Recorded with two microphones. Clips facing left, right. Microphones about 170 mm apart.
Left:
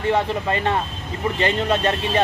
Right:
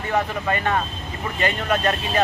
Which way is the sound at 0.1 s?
30° left (ahead or behind).